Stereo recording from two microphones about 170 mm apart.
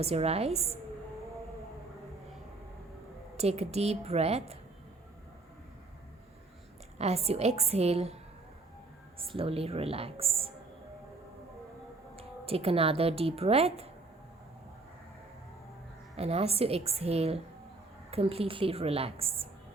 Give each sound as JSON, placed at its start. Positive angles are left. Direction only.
{"t": 0.0, "sound": "a woman's voice", "side_deg": -35}
{"t": 3.3, "sound": "a woman's voice", "side_deg": -40}
{"t": 7.0, "sound": "a woman's voice", "side_deg": -40}
{"t": 9.3, "sound": "a woman's voice", "side_deg": -35}
{"t": 12.1, "sound": "speech", "side_deg": -35}
{"t": 16.1, "sound": "a woman's voice", "side_deg": -35}